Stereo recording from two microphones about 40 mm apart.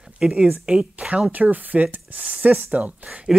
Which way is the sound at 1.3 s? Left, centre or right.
Right.